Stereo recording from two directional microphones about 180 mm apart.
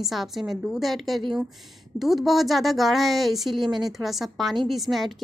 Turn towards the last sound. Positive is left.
turn(degrees=0)  # may be behind; listen again after turning